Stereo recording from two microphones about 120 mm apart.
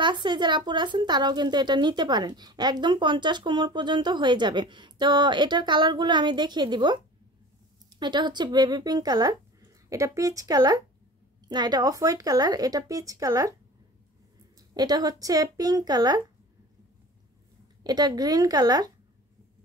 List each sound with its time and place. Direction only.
0.0 s speech: 40° right (ahead or behind)
8.0 s speech: 40° right (ahead or behind)
14.7 s speech: 35° right (ahead or behind)
17.8 s speech: 35° right (ahead or behind)